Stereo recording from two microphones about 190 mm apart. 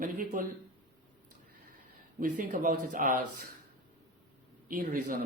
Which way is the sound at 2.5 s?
45° right (ahead or behind).